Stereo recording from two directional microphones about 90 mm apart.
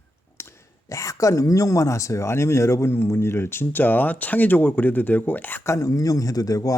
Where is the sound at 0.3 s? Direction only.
30° left (ahead or behind).